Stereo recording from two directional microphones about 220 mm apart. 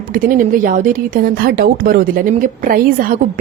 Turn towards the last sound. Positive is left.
turn(degrees=-40)  # may be behind; listen again after turning